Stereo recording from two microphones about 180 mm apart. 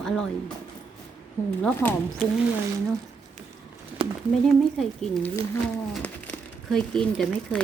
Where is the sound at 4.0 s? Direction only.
30° right (ahead or behind).